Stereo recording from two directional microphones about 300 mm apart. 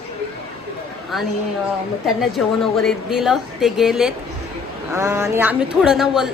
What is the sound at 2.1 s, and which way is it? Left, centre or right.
Speech, centre.